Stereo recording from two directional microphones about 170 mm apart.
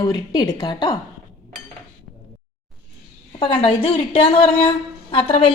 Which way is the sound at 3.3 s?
30° left (ahead or behind).